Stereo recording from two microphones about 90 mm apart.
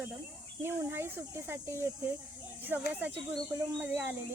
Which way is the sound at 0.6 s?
25° right (ahead or behind).